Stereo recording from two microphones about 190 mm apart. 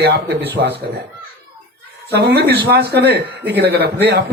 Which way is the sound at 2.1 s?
60° right (ahead or behind).